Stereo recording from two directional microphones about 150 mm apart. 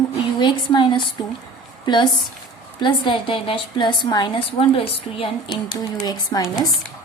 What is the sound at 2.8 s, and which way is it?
A woman's voice, 35° left (ahead or behind).